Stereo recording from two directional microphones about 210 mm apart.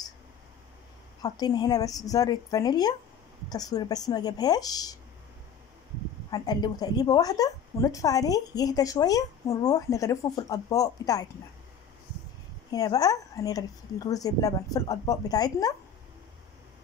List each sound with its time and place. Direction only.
1.2 s a woman's voice: 20° left (ahead or behind)
6.3 s a woman's voice: 20° left (ahead or behind)
12.7 s a woman's voice: 15° left (ahead or behind)